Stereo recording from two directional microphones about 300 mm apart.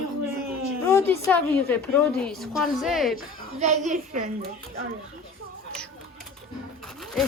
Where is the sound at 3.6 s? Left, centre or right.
Right.